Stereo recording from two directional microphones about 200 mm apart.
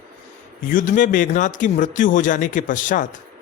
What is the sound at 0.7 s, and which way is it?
A woman's voice, 40° left (ahead or behind).